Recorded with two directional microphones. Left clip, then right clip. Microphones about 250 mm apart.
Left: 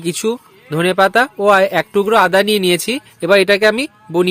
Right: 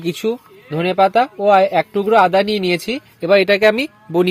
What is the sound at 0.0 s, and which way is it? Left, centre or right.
Speech, centre.